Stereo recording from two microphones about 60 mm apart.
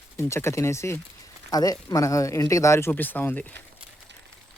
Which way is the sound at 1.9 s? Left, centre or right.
Left.